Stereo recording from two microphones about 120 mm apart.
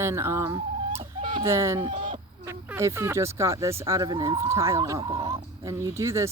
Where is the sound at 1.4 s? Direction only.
25° right (ahead or behind).